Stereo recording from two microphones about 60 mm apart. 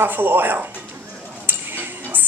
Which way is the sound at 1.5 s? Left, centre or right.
Right.